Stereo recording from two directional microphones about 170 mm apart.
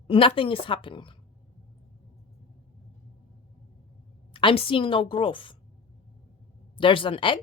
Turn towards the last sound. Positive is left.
turn(degrees=30)  # may be behind; listen again after turning